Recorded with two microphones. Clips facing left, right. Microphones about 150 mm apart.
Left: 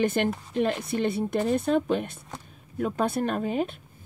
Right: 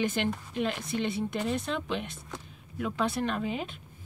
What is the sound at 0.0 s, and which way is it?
Speech, 50° left (ahead or behind).